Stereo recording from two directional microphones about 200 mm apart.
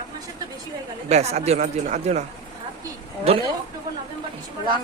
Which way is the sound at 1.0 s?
35° right (ahead or behind).